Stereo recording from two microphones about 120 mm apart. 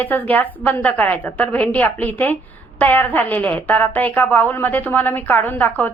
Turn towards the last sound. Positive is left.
turn(degrees=15)  # may be behind; listen again after turning